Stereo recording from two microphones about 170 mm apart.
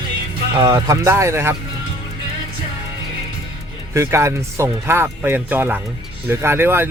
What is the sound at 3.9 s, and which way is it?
Speech, 15° right (ahead or behind).